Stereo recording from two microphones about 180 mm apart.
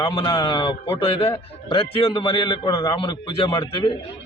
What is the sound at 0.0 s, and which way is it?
A man's voice, 25° left (ahead or behind).